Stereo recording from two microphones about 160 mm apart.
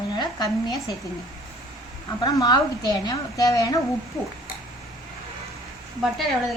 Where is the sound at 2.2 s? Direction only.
25° left (ahead or behind).